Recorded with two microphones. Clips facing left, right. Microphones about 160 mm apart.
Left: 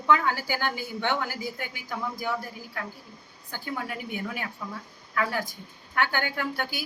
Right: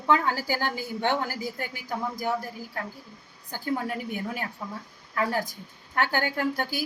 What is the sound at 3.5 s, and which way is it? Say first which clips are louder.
A woman's voice: right 5 dB; 35° right (ahead or behind).